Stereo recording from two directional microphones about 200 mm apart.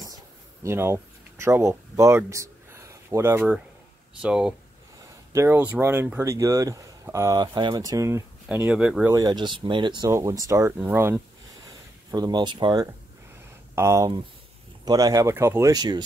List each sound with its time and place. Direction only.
0.7 s speech: 10° right (ahead or behind)
9.1 s speech: 20° right (ahead or behind)
11.6 s a sound: 20° right (ahead or behind)
13.7 s speech: 15° right (ahead or behind)